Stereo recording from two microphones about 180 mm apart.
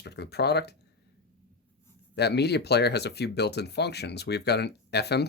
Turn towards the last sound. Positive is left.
turn(degrees=65)  # may be behind; listen again after turning